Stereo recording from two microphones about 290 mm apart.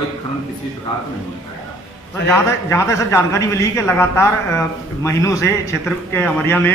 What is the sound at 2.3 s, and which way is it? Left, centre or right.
A man's voice, centre.